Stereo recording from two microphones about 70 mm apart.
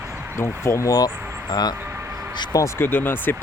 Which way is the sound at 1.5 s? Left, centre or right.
Left.